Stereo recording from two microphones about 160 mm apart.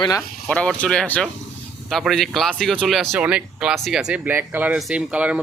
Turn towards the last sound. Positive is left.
turn(degrees=-10)  # may be behind; listen again after turning